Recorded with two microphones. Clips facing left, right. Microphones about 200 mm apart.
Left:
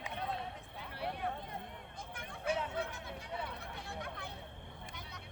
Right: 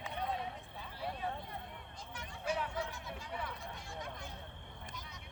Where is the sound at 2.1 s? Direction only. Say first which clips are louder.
Left 2 dB; 55° left (ahead or behind).